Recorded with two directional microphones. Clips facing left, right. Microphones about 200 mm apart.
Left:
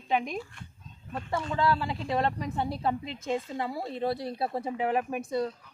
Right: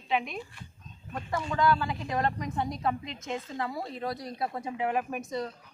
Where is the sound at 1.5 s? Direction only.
30° left (ahead or behind).